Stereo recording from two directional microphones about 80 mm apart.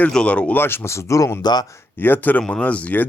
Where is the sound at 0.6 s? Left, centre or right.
Left.